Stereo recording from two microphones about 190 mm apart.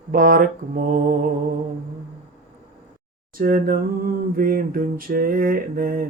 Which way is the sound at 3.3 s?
50° right (ahead or behind).